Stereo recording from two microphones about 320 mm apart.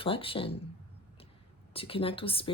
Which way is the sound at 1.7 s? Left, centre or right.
Centre.